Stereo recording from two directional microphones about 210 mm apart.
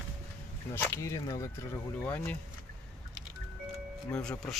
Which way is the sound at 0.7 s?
10° left (ahead or behind).